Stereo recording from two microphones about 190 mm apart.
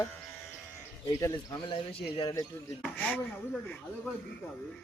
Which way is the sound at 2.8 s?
5° left (ahead or behind).